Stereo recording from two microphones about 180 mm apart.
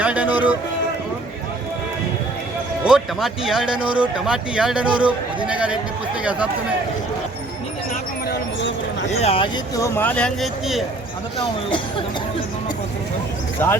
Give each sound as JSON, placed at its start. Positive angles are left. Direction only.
{"t": 0.0, "sound": "speech", "side_deg": -10}
{"t": 2.8, "sound": "speech", "side_deg": -5}
{"t": 9.0, "sound": "speech", "side_deg": 35}
{"t": 9.7, "sound": "speech", "side_deg": 15}
{"t": 13.6, "sound": "speech", "side_deg": 10}